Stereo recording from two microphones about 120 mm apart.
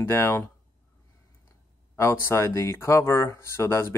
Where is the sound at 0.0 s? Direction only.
20° left (ahead or behind).